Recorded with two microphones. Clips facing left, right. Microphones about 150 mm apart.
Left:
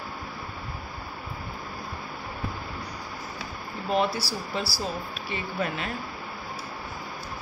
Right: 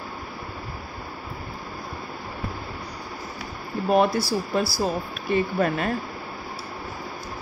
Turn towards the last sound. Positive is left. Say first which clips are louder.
# right 8 dB
turn(degrees=-50)  # may be behind; listen again after turning